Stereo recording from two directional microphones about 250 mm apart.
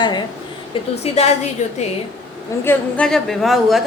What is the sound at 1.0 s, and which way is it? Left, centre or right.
Speech, left.